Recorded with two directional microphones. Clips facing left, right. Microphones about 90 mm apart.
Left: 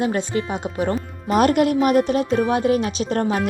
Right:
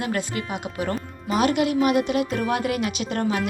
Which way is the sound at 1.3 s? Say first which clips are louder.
Left 4 dB; 45° left (ahead or behind).